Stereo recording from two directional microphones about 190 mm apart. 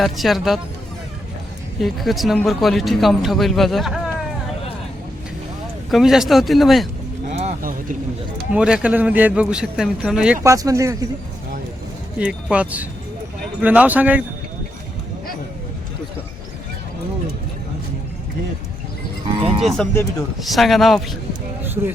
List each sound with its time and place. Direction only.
0.0 s speech: centre (ahead or behind)
1.8 s speech: centre (ahead or behind)
5.9 s speech: centre (ahead or behind)
7.3 s music: 35° right (ahead or behind)
8.5 s speech: 5° right (ahead or behind)
12.2 s speech: 5° right (ahead or behind)
19.6 s speech: 5° left (ahead or behind)